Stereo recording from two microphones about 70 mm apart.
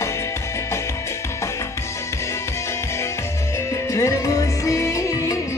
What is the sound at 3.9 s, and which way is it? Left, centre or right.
Music, left.